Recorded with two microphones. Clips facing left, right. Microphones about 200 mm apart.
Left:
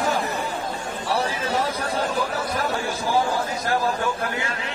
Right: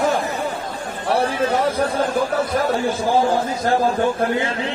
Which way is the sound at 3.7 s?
30° right (ahead or behind).